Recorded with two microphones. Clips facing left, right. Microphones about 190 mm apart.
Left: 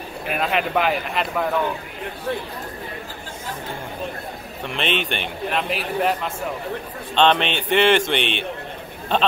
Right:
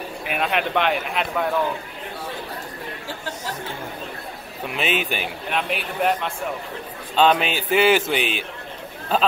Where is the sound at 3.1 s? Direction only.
75° right (ahead or behind).